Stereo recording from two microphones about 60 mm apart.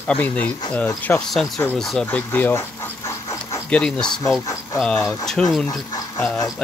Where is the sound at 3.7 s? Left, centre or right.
Centre.